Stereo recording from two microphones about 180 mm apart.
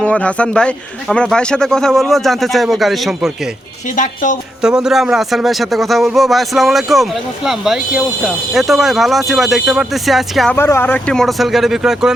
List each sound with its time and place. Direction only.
0.0 s a man's voice: 5° left (ahead or behind)
3.9 s speech: 45° left (ahead or behind)
4.6 s a man's voice: 5° right (ahead or behind)
10.5 s a man's voice: 10° left (ahead or behind)